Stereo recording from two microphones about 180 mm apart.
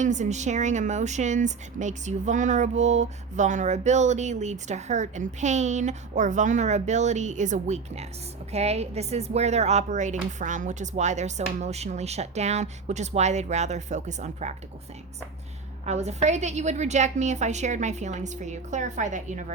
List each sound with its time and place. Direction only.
0.0 s speech: 40° right (ahead or behind)
15.9 s speech: 40° right (ahead or behind)